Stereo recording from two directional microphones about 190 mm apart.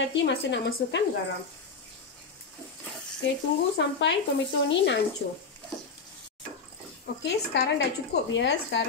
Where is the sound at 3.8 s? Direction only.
70° left (ahead or behind).